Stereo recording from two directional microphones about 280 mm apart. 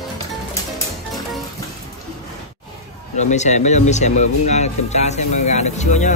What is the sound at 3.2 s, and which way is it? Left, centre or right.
Speech, left.